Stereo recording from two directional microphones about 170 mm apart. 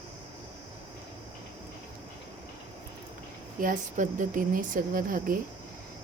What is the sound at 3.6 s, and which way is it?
Speech, 50° right (ahead or behind).